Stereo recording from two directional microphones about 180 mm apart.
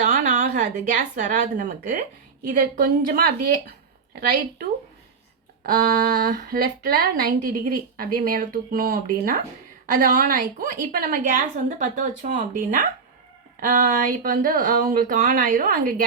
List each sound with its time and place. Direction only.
0.0 s a woman's voice: 45° right (ahead or behind)
5.6 s speech: 50° right (ahead or behind)